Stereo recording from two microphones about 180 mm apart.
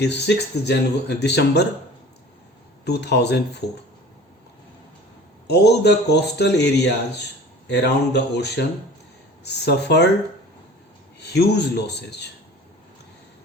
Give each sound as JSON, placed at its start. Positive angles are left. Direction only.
{"t": 0.0, "sound": "speech", "side_deg": 70}
{"t": 2.8, "sound": "speech", "side_deg": 65}
{"t": 5.5, "sound": "speech", "side_deg": 65}
{"t": 11.3, "sound": "speech", "side_deg": 65}